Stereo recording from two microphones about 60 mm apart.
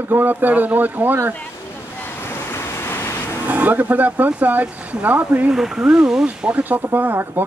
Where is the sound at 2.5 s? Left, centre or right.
Left.